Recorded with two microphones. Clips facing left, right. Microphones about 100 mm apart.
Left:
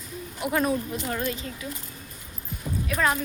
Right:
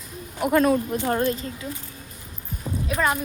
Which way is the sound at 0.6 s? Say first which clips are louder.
Right 5 dB; 90° right.